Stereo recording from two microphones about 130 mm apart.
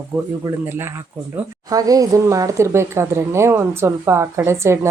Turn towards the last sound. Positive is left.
turn(degrees=-20)  # may be behind; listen again after turning